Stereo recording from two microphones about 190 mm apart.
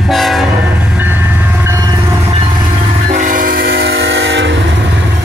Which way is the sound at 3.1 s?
40° right (ahead or behind).